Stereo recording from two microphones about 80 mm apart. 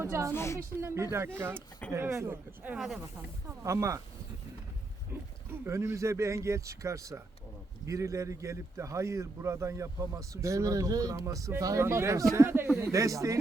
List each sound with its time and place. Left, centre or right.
0.0 s a man's voice: right
0.3 s a woman's voice: left
0.8 s a man's voice: right
2.7 s speech: centre
3.6 s a man's voice: right
5.5 s a man's voice: right